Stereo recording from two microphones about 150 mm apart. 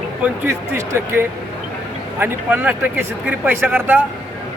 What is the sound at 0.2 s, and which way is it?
Speech, 20° right (ahead or behind).